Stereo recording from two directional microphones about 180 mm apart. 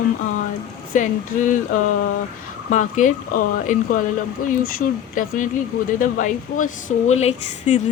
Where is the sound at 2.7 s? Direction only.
45° left (ahead or behind).